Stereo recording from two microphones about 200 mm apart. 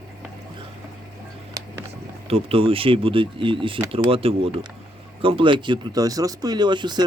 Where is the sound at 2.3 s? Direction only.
30° right (ahead or behind).